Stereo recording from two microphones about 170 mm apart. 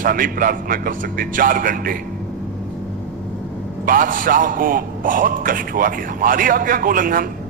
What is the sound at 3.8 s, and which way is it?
A man's voice, 55° right (ahead or behind).